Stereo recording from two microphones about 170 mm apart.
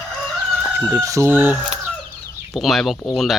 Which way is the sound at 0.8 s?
20° right (ahead or behind).